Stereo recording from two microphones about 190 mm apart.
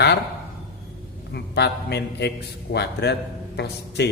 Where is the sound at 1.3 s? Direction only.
60° left (ahead or behind).